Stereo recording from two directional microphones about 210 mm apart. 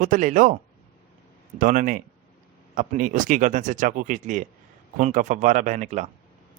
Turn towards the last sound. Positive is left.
turn(degrees=-35)  # may be behind; listen again after turning